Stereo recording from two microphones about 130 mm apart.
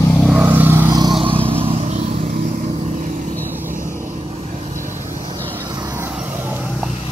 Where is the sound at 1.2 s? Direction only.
45° right (ahead or behind).